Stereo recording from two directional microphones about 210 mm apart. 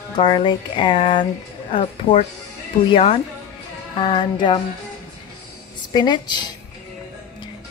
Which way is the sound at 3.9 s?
25° left (ahead or behind).